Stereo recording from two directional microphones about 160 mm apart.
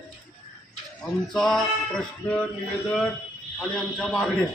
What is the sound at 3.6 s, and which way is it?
Speech, 5° left (ahead or behind).